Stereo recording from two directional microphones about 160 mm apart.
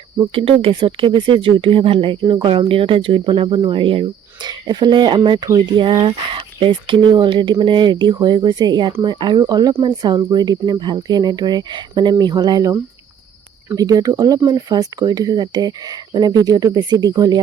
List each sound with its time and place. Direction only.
0.3 s speech: 35° right (ahead or behind)